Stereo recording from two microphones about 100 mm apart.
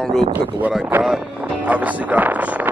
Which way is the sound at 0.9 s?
15° right (ahead or behind).